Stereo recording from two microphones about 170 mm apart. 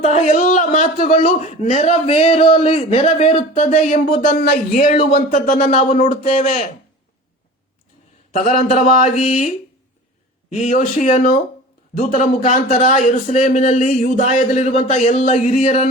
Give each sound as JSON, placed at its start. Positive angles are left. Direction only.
{"t": 0.0, "sound": "a man's voice", "side_deg": 45}
{"t": 8.3, "sound": "a man's voice", "side_deg": 50}
{"t": 10.5, "sound": "a man's voice", "side_deg": 45}